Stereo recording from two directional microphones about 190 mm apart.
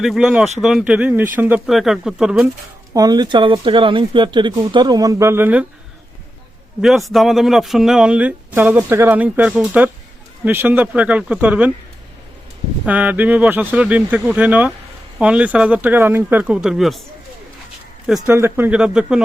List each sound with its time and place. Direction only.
0.0 s speech: centre (ahead or behind)
2.9 s speech: 20° right (ahead or behind)
6.8 s speech: centre (ahead or behind)
12.8 s speech: 10° right (ahead or behind)
18.3 s speech: 10° right (ahead or behind)